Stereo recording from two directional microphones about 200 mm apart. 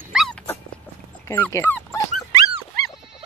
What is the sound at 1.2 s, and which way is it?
Dog, 10° left (ahead or behind).